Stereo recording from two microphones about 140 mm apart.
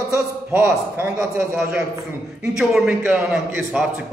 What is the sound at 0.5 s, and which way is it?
Speech, 10° right (ahead or behind).